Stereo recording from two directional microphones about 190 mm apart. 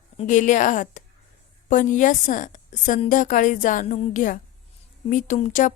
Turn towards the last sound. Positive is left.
turn(degrees=40)  # may be behind; listen again after turning